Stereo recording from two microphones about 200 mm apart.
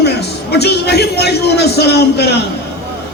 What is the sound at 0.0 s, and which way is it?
A man's voice, 55° left (ahead or behind).